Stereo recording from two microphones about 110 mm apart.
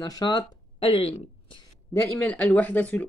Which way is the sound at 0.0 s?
40° left (ahead or behind).